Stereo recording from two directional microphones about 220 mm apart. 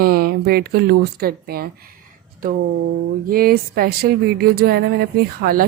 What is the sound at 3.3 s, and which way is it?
Speech, 40° right (ahead or behind).